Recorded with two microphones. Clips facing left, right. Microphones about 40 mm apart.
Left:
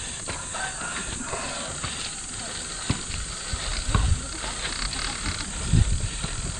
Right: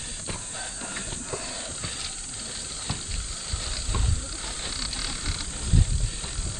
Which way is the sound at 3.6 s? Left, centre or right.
Left.